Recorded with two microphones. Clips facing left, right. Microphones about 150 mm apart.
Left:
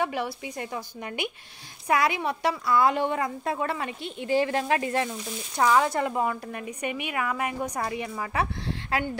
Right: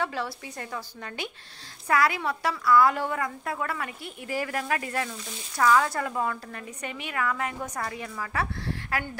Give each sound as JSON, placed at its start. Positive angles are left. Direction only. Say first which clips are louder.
{"t": 0.0, "sound": "a woman's voice", "louder": "left 2 dB", "side_deg": 15}